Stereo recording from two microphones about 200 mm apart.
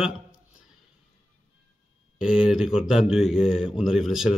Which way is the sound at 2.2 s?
5° right (ahead or behind).